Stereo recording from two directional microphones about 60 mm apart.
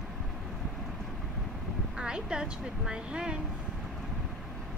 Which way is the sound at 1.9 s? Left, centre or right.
Centre.